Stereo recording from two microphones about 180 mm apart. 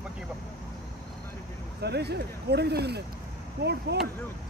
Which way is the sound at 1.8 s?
65° right (ahead or behind).